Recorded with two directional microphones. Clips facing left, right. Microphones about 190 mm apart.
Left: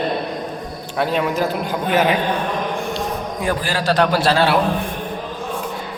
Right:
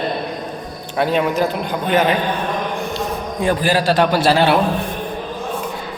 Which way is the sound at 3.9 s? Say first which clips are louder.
Left 1 dB; 5° right (ahead or behind).